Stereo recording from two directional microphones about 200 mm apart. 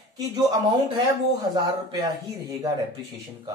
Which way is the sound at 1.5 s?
20° right (ahead or behind).